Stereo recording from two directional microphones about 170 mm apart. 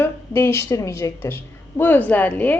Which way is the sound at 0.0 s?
15° left (ahead or behind).